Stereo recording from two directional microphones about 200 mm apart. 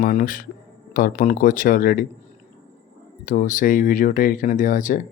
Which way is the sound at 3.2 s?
40° left (ahead or behind).